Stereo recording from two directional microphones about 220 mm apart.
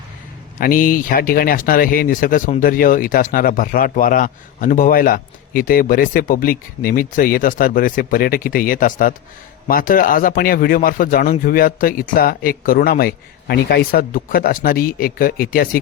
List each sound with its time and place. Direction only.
0.6 s speech: 40° left (ahead or behind)